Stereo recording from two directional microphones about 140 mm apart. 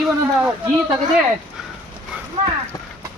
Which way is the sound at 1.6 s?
5° right (ahead or behind).